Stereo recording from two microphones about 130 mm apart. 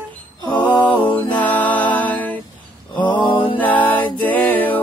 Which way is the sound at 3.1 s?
35° left (ahead or behind).